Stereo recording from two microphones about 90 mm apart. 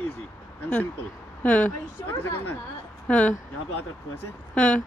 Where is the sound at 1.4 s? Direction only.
15° left (ahead or behind).